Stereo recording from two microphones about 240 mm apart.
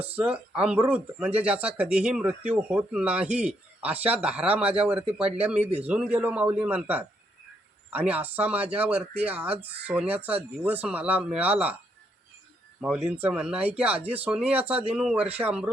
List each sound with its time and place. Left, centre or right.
0.2 s a man's voice: centre
3.9 s speech: right
4.2 s speech: centre
12.8 s speech: centre